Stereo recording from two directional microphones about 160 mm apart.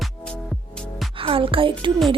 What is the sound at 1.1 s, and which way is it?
Speech, 35° right (ahead or behind).